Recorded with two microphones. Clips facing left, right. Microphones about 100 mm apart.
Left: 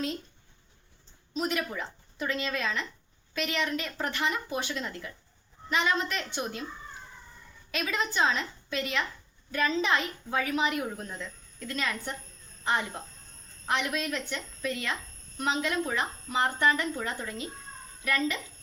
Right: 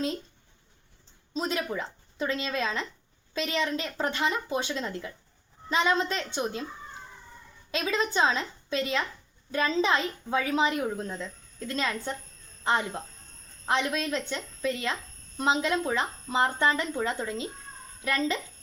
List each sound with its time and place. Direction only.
1.3 s a child's voice: 25° right (ahead or behind)
7.7 s a child's voice: 25° right (ahead or behind)